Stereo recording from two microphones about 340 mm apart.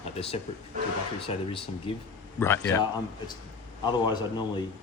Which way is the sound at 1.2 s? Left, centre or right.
Centre.